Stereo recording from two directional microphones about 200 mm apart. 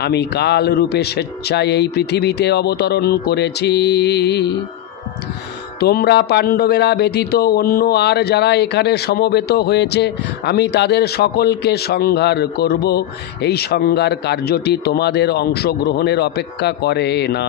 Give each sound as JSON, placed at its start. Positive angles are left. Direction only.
{"t": 0.0, "sound": "speech", "side_deg": 55}
{"t": 5.8, "sound": "speech", "side_deg": 50}